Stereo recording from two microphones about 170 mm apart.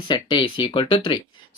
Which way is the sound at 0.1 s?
30° left (ahead or behind).